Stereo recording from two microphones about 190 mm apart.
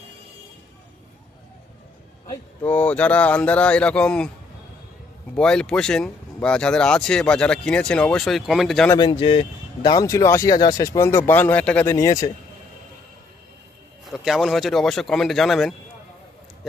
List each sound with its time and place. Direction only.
2.6 s speech: 5° left (ahead or behind)
5.4 s speech: 5° left (ahead or behind)
9.0 s speech: 25° left (ahead or behind)
14.1 s speech: centre (ahead or behind)